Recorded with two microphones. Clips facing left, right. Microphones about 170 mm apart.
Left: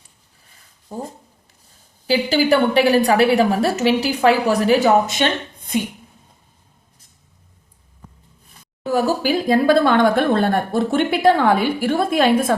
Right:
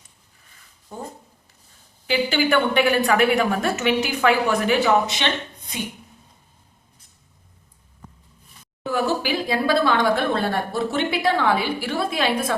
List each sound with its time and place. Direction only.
0.9 s a woman's voice: 40° left (ahead or behind)
8.9 s speech: 40° left (ahead or behind)